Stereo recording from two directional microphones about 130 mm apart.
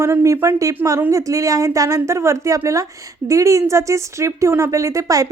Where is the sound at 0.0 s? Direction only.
20° right (ahead or behind).